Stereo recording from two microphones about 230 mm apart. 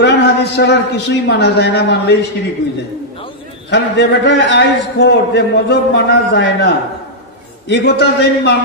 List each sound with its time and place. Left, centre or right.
0.0 s a man's voice: left
3.7 s a man's voice: left